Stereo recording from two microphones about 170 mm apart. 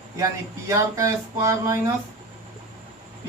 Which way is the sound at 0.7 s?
20° right (ahead or behind).